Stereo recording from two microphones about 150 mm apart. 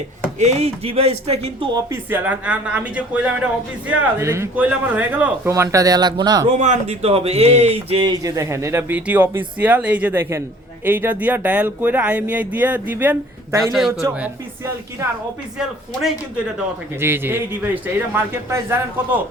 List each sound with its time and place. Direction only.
0.3 s speech: 50° right (ahead or behind)
1.7 s speech: 15° right (ahead or behind)
4.2 s speech: 20° right (ahead or behind)
6.5 s speech: 50° right (ahead or behind)
8.1 s speech: 20° right (ahead or behind)
13.7 s speech: centre (ahead or behind)
15.5 s speech: centre (ahead or behind)
16.6 s speech: 15° right (ahead or behind)